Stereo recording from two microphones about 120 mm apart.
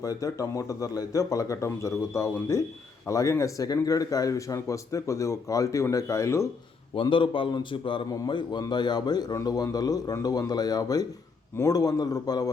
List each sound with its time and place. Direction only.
0.0 s speech: 30° left (ahead or behind)
6.9 s a man's voice: 45° left (ahead or behind)